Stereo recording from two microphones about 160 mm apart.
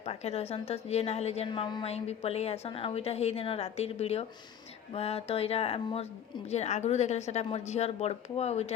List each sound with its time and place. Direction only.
0.0 s a woman's voice: 40° left (ahead or behind)